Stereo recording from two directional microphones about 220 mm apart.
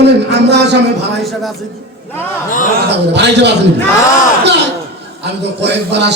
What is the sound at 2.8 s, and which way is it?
Speech, 50° right (ahead or behind).